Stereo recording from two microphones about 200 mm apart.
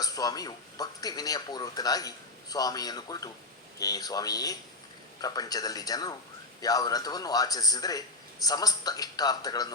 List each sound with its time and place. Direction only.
0.0 s speech: 20° left (ahead or behind)